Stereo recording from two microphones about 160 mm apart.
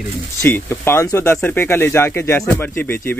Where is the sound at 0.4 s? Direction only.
15° left (ahead or behind).